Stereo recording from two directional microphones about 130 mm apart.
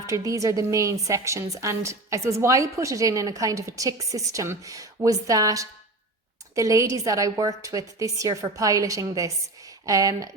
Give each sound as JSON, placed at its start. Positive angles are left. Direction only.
{"t": 0.1, "sound": "a woman's voice", "side_deg": -25}